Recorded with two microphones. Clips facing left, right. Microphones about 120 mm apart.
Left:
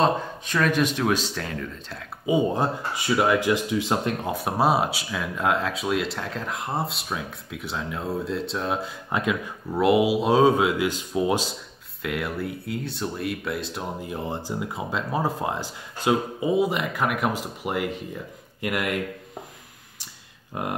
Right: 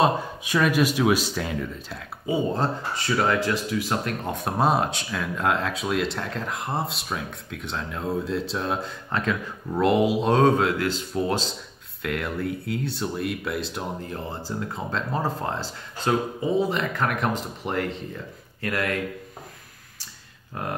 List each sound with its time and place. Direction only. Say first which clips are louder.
0.0 s speech: even; 10° right (ahead or behind)
2.2 s speech: left 2 dB; 15° left (ahead or behind)
4.3 s speech: even; 5° left (ahead or behind)
9.1 s speech: left 1 dB; 10° left (ahead or behind)
14.0 s speech: left 2 dB; 15° left (ahead or behind)
20.5 s speech: left 2 dB; 15° left (ahead or behind)